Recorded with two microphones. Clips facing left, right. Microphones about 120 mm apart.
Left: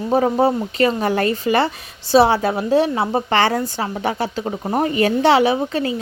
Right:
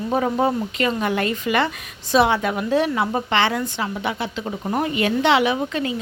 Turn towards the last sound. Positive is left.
turn(degrees=35)  # may be behind; listen again after turning